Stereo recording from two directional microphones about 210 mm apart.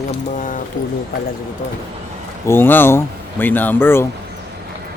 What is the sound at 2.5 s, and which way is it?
Speech, 10° left (ahead or behind).